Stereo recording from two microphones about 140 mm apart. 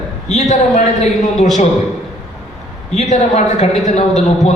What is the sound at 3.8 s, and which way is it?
Speech, 55° left (ahead or behind).